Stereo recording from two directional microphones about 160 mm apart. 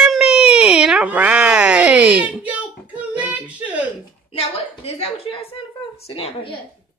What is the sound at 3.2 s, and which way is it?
Child singing, 10° right (ahead or behind).